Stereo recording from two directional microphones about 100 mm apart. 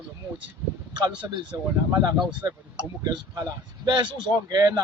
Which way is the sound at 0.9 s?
50° right (ahead or behind).